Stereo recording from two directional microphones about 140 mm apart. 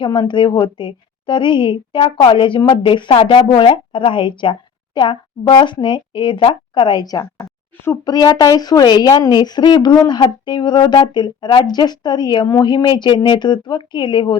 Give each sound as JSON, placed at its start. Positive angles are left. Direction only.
{"t": 0.0, "sound": "a woman's voice", "side_deg": 35}